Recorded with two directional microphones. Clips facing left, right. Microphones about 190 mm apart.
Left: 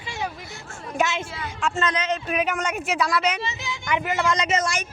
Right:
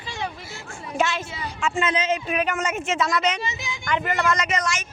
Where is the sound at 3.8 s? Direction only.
10° left (ahead or behind).